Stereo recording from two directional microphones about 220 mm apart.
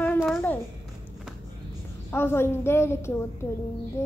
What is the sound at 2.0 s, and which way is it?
A child's voice, 10° left (ahead or behind).